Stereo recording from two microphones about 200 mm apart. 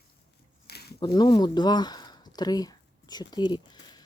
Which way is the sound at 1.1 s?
20° left (ahead or behind).